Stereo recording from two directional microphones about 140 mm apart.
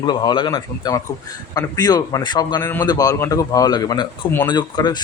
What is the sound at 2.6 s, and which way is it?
A man's voice, 15° left (ahead or behind).